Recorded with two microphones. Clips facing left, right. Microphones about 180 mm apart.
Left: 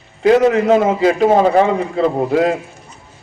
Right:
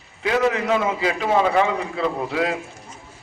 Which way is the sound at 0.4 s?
40° left (ahead or behind).